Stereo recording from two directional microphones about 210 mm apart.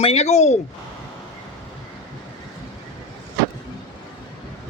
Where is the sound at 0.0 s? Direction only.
30° left (ahead or behind).